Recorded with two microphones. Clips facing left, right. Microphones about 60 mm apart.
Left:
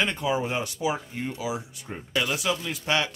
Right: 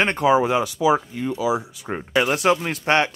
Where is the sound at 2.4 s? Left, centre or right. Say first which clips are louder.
Right 9 dB; right.